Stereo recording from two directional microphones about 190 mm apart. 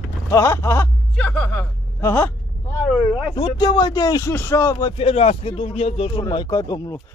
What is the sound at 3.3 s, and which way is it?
Speech, 20° left (ahead or behind).